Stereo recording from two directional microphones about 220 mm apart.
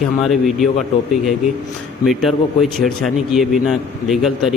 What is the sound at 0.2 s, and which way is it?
Speech, centre (ahead or behind).